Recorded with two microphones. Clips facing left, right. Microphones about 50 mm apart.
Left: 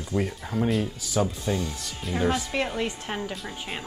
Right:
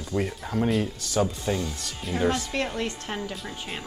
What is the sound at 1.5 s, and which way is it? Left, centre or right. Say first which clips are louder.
Speech: even; centre.